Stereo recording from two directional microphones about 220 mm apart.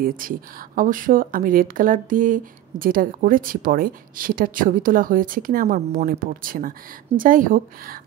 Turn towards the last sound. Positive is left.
turn(degrees=-40)  # may be behind; listen again after turning